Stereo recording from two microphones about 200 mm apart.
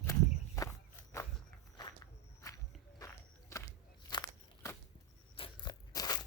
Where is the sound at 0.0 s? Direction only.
15° left (ahead or behind).